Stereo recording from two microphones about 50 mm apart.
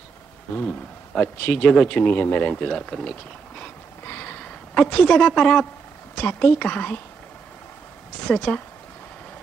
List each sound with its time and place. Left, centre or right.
0.6 s speech: left
2.5 s speech: centre
4.0 s a sound: left
4.3 s speech: left; by 5.6 s centre
6.2 s speech: left
8.3 s speech: left